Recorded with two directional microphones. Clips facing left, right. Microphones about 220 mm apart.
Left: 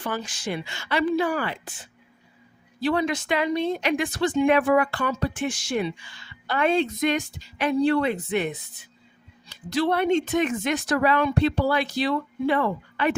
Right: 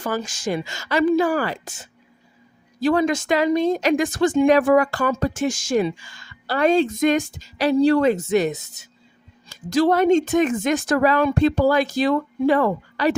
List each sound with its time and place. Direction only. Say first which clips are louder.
0.0 s speech: right 5 dB; 45° right (ahead or behind)